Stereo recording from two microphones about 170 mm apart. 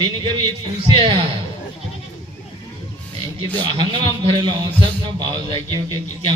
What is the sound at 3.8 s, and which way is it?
A man's voice, 30° right (ahead or behind).